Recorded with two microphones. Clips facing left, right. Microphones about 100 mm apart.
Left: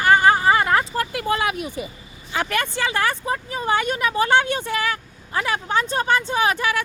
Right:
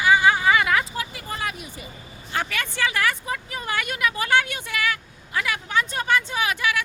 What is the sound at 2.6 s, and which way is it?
Speech, 30° left (ahead or behind).